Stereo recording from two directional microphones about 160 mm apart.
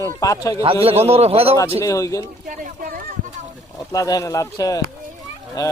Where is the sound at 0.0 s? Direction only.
20° left (ahead or behind).